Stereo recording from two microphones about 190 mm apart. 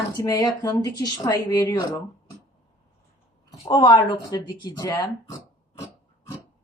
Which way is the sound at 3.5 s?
30° left (ahead or behind).